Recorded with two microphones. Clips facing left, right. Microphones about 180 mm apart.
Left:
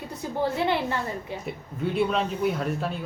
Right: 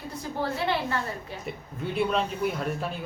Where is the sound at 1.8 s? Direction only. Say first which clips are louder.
Left 2 dB; centre (ahead or behind).